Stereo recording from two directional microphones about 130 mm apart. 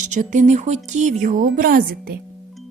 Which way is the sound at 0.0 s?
70° right (ahead or behind).